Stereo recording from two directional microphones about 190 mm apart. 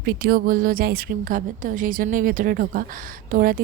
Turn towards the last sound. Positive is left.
turn(degrees=-50)  # may be behind; listen again after turning